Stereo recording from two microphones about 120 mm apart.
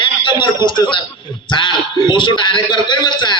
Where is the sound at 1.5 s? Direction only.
40° left (ahead or behind).